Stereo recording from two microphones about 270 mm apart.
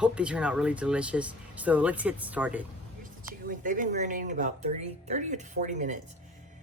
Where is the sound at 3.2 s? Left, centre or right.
Right.